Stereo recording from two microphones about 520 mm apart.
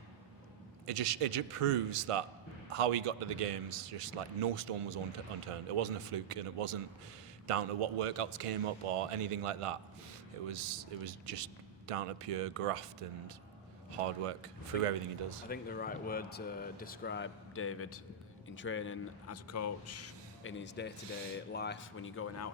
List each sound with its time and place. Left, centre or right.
0.9 s a man's voice: right
15.4 s a man's voice: centre